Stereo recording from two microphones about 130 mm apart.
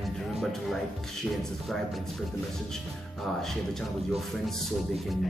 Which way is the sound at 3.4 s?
Centre (ahead or behind).